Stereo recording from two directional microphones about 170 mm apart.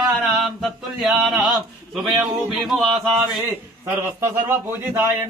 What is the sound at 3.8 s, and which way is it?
A man's voice, 15° right (ahead or behind).